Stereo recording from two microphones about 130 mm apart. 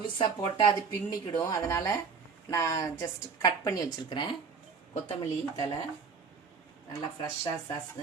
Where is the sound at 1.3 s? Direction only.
30° left (ahead or behind).